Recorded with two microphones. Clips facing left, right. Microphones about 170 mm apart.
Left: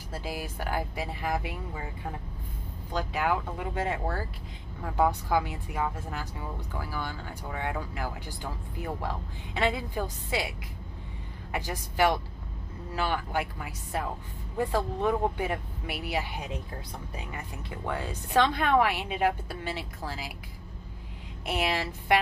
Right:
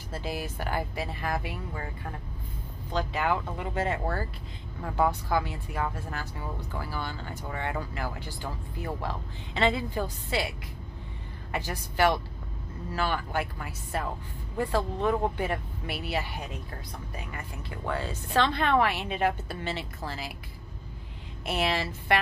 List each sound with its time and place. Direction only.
0.1 s speech: 10° left (ahead or behind)
2.9 s speech: 10° left (ahead or behind)
5.4 s speech: 15° left (ahead or behind)
6.7 s speech: centre (ahead or behind)
11.5 s speech: 15° left (ahead or behind)
21.5 s speech: 15° left (ahead or behind)